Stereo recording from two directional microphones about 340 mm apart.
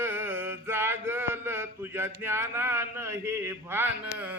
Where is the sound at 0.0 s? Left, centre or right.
Centre.